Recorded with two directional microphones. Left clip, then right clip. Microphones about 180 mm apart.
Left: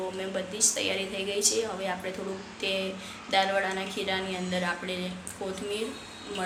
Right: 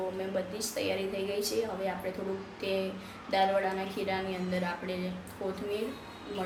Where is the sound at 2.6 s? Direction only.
5° right (ahead or behind).